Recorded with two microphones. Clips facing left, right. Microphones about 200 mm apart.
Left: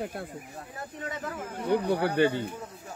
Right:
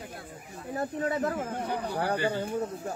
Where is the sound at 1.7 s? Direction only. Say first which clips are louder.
Left 7 dB; 65° left (ahead or behind).